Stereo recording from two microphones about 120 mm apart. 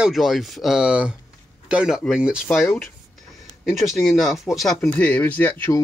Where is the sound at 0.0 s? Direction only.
Centre (ahead or behind).